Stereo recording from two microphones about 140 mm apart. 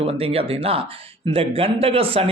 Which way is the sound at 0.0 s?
45° right (ahead or behind).